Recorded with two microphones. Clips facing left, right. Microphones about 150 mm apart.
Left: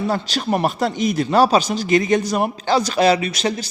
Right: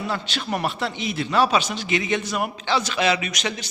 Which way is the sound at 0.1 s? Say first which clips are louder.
Left 6 dB; 40° left (ahead or behind).